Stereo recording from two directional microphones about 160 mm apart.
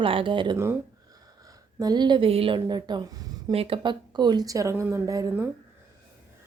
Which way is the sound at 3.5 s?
35° right (ahead or behind).